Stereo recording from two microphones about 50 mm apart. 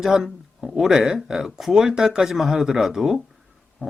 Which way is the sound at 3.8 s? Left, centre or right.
Right.